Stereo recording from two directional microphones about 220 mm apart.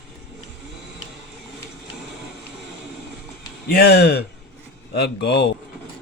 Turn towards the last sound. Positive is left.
turn(degrees=55)  # may be behind; listen again after turning